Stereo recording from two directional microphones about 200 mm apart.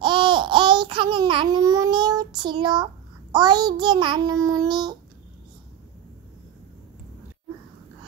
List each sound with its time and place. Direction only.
0.0 s babbling: 25° right (ahead or behind)